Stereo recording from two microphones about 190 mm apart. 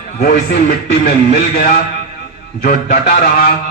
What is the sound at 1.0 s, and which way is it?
Speech, 50° left (ahead or behind).